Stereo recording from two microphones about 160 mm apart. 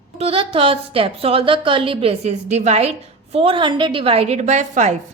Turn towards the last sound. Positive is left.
turn(degrees=-45)  # may be behind; listen again after turning